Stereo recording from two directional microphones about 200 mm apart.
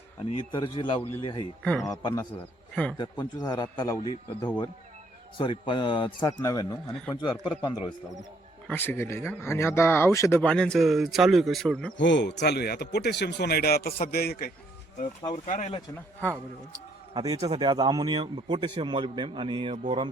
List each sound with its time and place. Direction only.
0.3 s a man's voice: 25° left (ahead or behind)
1.6 s speech: 5° left (ahead or behind)
1.9 s a man's voice: 20° left (ahead or behind)
2.3 s a man's voice: 5° left (ahead or behind)
3.0 s a man's voice: 20° left (ahead or behind)
8.6 s speech: 10° left (ahead or behind)
11.9 s speech: 65° left (ahead or behind)
15.4 s speech: 35° left (ahead or behind)
17.2 s a man's voice: 20° right (ahead or behind)